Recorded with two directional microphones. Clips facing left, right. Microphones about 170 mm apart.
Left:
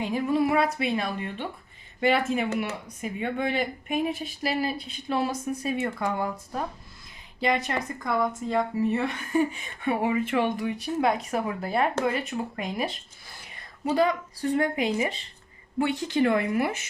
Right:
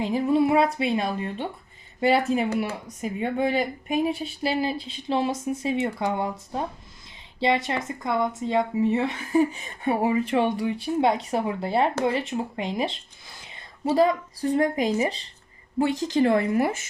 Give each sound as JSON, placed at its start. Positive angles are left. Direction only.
{"t": 0.0, "sound": "a woman's voice", "side_deg": -25}